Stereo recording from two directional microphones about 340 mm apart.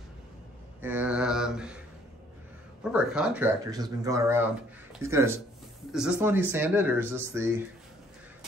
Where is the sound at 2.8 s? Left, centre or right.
Centre.